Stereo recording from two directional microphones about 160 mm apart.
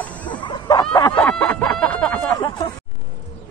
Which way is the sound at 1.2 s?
10° left (ahead or behind).